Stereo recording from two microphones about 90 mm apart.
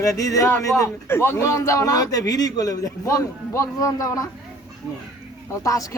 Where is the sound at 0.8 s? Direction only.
30° left (ahead or behind).